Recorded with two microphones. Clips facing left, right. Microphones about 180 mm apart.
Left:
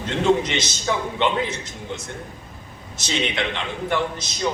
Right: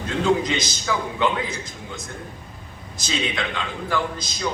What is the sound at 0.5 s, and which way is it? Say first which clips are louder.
A man's voice: left 1 dB; 25° left (ahead or behind).